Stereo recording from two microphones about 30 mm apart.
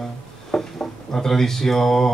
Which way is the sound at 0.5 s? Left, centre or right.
Centre.